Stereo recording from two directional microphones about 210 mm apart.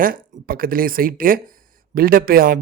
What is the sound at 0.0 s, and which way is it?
A man's voice, 45° right (ahead or behind).